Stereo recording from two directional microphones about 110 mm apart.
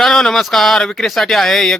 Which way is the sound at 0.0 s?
5° left (ahead or behind).